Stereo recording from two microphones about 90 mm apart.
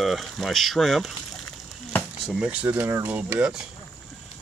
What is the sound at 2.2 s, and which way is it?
Speech, 10° right (ahead or behind).